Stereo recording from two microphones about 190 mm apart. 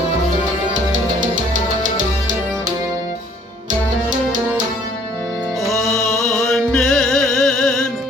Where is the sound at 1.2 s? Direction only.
45° right (ahead or behind).